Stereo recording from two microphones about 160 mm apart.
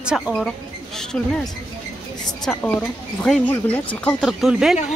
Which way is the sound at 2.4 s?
5° left (ahead or behind).